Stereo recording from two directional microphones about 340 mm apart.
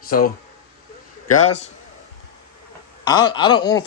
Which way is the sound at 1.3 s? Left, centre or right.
Centre.